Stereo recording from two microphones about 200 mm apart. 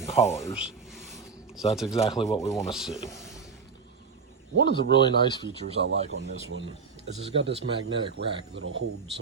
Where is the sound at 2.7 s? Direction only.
Centre (ahead or behind).